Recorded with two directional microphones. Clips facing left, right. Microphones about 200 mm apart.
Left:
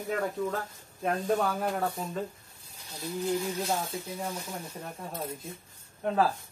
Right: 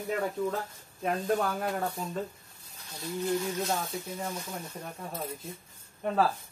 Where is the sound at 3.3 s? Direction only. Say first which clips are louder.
Even; 15° left (ahead or behind).